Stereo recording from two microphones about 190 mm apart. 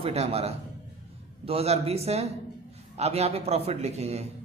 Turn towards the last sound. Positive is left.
turn(degrees=-35)  # may be behind; listen again after turning